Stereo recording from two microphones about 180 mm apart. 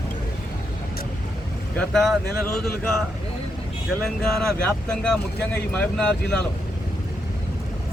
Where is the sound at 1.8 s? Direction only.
5° left (ahead or behind).